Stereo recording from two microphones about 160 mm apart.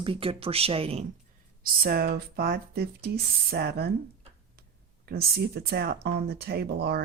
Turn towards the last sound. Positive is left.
turn(degrees=-80)